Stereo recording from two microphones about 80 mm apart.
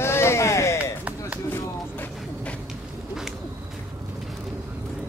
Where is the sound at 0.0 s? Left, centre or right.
Left.